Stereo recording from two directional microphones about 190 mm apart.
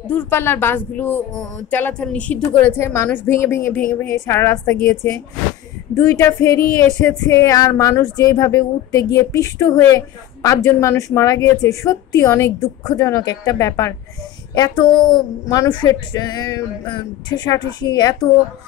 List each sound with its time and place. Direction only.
0.1 s a woman's voice: 10° left (ahead or behind)